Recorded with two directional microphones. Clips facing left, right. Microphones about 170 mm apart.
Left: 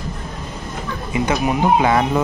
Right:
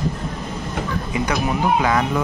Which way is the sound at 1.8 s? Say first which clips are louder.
Left 3 dB; 25° left (ahead or behind).